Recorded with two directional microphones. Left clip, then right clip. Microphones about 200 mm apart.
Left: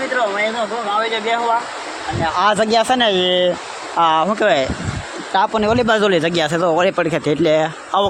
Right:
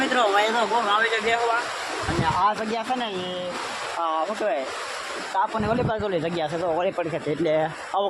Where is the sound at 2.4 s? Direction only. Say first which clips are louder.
Left 9 dB; 50° left (ahead or behind).